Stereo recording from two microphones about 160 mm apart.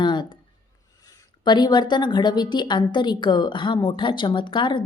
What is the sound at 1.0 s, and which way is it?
A woman's voice, 25° left (ahead or behind).